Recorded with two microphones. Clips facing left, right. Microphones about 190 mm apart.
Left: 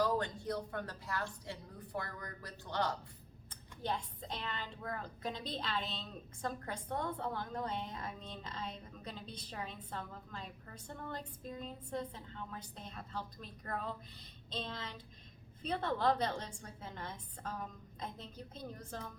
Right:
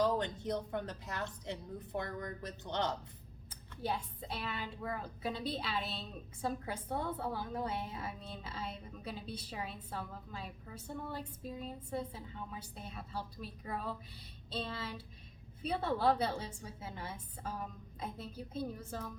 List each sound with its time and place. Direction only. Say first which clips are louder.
0.0 s a woman's voice: right 2 dB; 20° right (ahead or behind)
3.5 s a woman's voice: right 1 dB; 5° right (ahead or behind)